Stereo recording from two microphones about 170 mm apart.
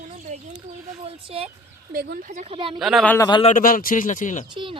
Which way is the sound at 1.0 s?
35° right (ahead or behind).